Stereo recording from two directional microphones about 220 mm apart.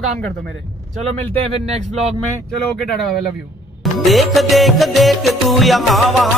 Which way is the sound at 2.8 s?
Centre (ahead or behind).